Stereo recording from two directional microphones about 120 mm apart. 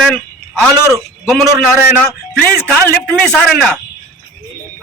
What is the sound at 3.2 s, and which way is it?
Speech, 5° left (ahead or behind).